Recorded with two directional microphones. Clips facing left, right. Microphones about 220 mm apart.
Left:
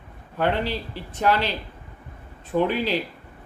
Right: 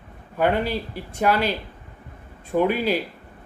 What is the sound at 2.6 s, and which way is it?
Speech, 10° right (ahead or behind).